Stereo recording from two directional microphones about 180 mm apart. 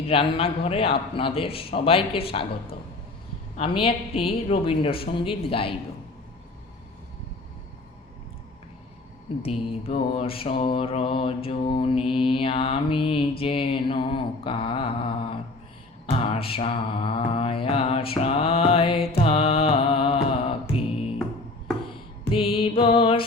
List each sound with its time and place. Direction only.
0.1 s mantra: 30° left (ahead or behind)
3.6 s mantra: 30° left (ahead or behind)
9.4 s mantra: 35° left (ahead or behind)
22.3 s music: 30° left (ahead or behind)